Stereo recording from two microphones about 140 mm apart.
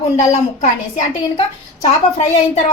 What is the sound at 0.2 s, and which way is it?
Speech, 60° left (ahead or behind).